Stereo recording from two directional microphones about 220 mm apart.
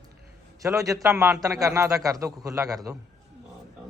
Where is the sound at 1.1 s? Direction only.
5° right (ahead or behind).